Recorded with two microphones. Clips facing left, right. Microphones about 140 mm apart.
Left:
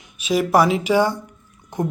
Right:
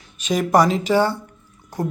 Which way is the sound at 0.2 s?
5° left (ahead or behind).